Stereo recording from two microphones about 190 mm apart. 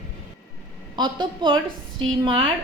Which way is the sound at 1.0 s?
25° right (ahead or behind).